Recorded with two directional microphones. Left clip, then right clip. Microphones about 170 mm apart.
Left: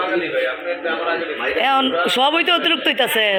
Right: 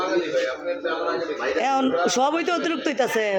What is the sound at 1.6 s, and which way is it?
A man's voice, 15° right (ahead or behind).